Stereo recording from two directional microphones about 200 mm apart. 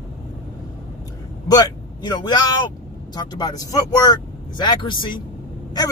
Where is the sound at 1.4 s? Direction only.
20° left (ahead or behind).